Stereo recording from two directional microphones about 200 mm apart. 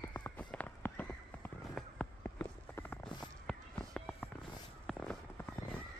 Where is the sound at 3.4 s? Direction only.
5° left (ahead or behind).